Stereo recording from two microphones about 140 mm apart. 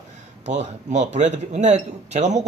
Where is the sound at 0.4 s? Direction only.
55° right (ahead or behind).